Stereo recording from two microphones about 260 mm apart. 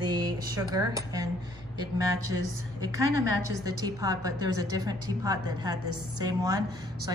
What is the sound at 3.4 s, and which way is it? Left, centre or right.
A woman's voice, centre.